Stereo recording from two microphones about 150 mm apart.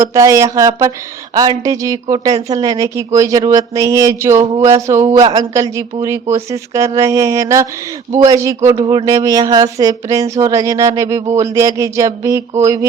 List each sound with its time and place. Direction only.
0.0 s speech: 20° right (ahead or behind)